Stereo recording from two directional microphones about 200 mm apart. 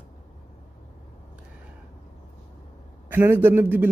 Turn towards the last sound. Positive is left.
turn(degrees=-10)  # may be behind; listen again after turning